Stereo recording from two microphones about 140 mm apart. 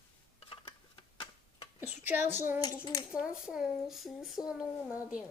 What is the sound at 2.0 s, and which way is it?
Speech, 15° right (ahead or behind).